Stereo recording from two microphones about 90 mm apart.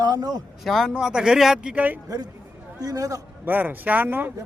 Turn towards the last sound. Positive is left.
turn(degrees=-20)  # may be behind; listen again after turning